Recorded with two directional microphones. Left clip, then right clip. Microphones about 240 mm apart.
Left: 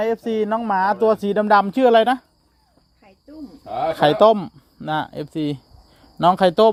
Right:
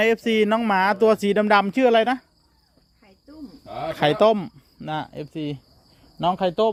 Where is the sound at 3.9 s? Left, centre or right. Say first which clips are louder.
Left 4 dB; centre.